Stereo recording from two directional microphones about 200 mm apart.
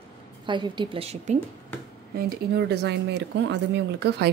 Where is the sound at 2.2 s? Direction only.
50° right (ahead or behind).